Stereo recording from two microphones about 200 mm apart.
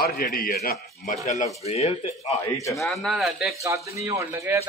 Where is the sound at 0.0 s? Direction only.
45° left (ahead or behind).